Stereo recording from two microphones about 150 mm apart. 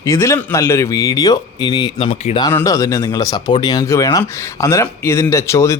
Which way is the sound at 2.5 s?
15° left (ahead or behind).